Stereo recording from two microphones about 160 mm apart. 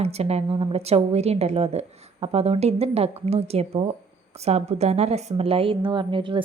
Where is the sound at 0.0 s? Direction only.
40° right (ahead or behind).